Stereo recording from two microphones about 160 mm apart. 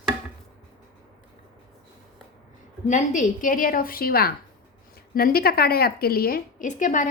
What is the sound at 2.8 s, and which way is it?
A woman's voice, 50° left (ahead or behind).